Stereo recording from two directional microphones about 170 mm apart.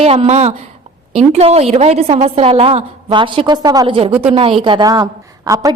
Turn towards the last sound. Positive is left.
turn(degrees=-20)  # may be behind; listen again after turning